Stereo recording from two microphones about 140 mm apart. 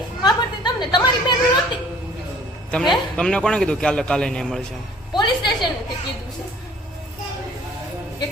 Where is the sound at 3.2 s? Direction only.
5° left (ahead or behind).